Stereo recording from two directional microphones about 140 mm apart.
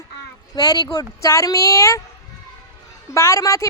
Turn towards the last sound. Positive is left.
turn(degrees=20)  # may be behind; listen again after turning